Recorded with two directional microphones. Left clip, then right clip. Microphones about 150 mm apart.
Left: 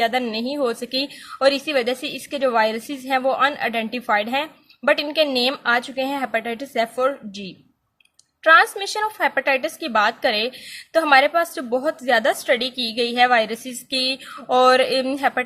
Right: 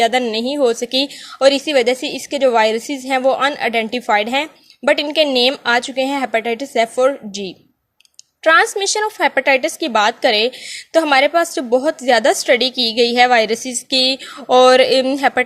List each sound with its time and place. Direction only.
0.0 s speech: 35° right (ahead or behind)
8.4 s speech: 35° right (ahead or behind)